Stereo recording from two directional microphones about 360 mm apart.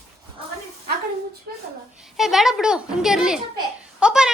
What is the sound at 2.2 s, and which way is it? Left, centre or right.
A child's voice, centre.